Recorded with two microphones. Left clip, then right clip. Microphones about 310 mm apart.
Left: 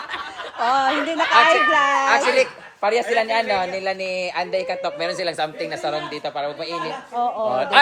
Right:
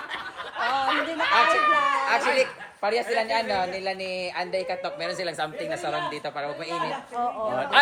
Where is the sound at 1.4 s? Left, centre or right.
Left.